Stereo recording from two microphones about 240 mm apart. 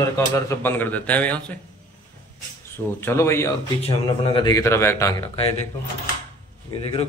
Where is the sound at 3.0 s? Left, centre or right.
Centre.